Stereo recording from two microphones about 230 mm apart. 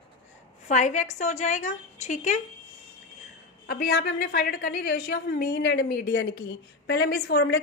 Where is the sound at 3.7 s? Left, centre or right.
Left.